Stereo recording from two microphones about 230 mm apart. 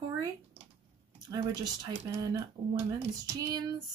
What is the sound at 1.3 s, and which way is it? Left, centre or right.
Speech, centre.